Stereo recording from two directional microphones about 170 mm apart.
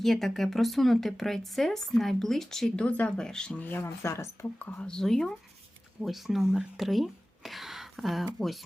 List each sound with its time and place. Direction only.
0.0 s speech: centre (ahead or behind)